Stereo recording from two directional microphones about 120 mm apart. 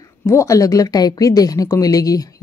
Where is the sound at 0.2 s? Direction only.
20° left (ahead or behind).